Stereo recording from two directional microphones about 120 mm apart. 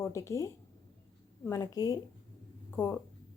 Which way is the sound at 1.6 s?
30° left (ahead or behind).